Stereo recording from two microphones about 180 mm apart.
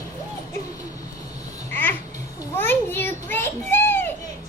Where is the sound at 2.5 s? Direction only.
10° left (ahead or behind).